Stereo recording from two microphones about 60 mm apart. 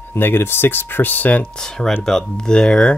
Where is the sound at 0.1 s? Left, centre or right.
Left.